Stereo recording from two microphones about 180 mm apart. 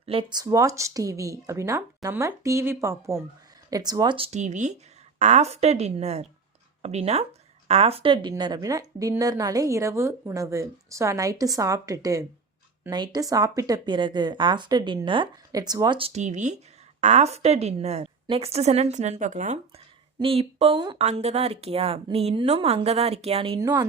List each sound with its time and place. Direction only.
0.0 s a woman's voice: 30° right (ahead or behind)
13.3 s a woman's voice: 20° right (ahead or behind)
21.0 s a woman's voice: 35° right (ahead or behind)
23.6 s a woman's voice: 20° right (ahead or behind)